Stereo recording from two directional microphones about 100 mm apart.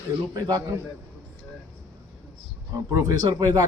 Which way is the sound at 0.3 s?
40° right (ahead or behind).